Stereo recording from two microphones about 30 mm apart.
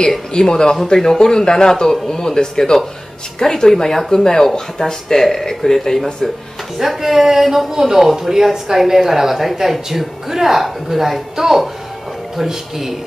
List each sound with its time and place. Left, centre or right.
0.3 s a man's voice: left; by 6.0 s centre
6.8 s speech: centre